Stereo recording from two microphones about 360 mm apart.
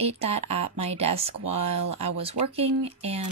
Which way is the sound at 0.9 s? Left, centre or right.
Centre.